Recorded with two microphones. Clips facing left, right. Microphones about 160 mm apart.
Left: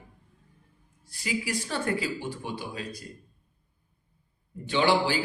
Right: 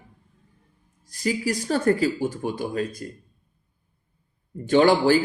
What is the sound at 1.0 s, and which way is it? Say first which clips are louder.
Speech: right 7 dB; 40° right (ahead or behind).